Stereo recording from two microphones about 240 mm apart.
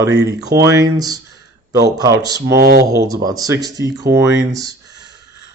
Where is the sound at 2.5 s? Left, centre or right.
Right.